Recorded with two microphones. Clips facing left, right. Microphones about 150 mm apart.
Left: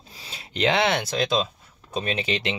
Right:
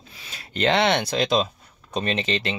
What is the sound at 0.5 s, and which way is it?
Speech, 10° left (ahead or behind).